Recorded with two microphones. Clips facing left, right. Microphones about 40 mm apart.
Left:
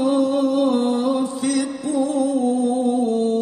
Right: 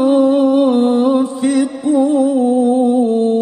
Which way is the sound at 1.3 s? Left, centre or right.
Right.